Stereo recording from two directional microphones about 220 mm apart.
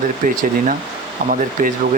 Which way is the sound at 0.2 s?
40° right (ahead or behind).